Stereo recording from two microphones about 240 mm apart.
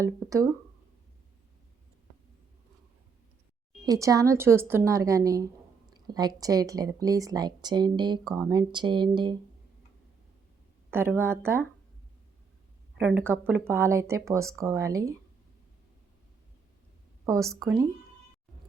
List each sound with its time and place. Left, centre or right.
0.0 s speech: centre
3.8 s speech: centre
10.9 s speech: centre
13.0 s speech: centre
17.2 s a woman's voice: centre